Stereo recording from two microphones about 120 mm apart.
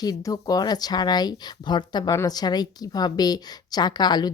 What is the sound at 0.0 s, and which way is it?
A woman's voice, 30° left (ahead or behind).